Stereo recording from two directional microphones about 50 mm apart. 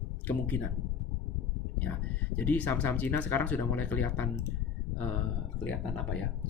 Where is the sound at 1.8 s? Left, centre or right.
Left.